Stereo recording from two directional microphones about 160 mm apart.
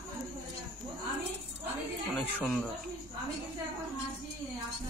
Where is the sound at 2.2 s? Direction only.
Centre (ahead or behind).